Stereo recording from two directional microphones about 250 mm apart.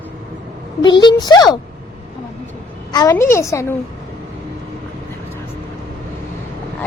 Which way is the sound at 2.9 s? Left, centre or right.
Centre.